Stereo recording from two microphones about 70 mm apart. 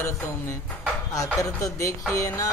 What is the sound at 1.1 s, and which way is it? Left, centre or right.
Speech, left.